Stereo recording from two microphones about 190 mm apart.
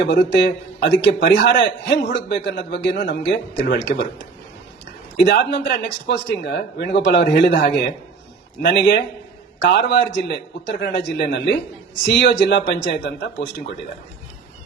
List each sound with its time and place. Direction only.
0.0 s speech: 65° left (ahead or behind)
5.1 s a man's voice: 65° left (ahead or behind)